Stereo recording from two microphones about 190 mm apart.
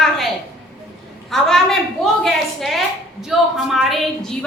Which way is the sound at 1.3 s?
Centre (ahead or behind).